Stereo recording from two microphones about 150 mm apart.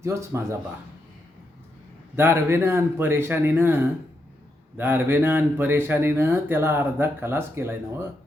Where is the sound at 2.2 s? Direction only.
15° right (ahead or behind).